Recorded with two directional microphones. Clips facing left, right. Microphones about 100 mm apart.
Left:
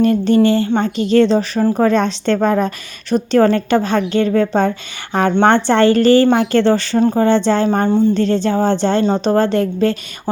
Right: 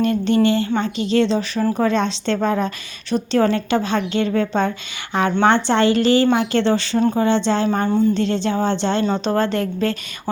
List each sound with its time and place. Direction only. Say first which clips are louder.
0.0 s speech: left 4 dB; 35° left (ahead or behind)
0.8 s a woman's voice: left 5 dB; 45° left (ahead or behind)
7.0 s speech: left 4 dB; 35° left (ahead or behind)
7.3 s a woman's voice: left 4 dB; 50° left (ahead or behind)
7.9 s speech: left 2 dB; 30° left (ahead or behind)
8.1 s speech: left 4 dB; 45° left (ahead or behind)